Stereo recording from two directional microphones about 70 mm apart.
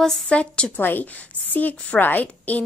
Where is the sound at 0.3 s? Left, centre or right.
Centre.